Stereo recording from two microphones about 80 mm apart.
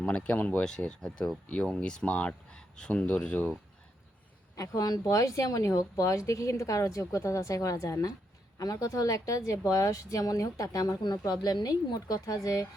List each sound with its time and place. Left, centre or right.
0.0 s speech: centre
4.5 s speech: left
11.0 s speech: left